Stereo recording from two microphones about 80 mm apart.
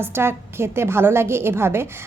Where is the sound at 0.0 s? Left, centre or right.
Right.